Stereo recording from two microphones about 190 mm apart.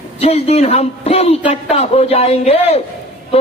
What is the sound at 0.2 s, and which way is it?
A woman's voice, 35° left (ahead or behind).